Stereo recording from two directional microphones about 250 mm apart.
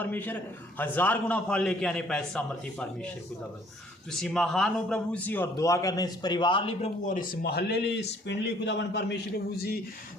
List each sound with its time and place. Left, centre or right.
0.0 s a man's voice: centre
4.1 s speech: centre; by 9.1 s left